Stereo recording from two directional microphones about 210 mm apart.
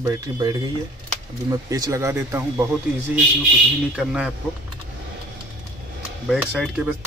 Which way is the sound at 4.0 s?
5° right (ahead or behind).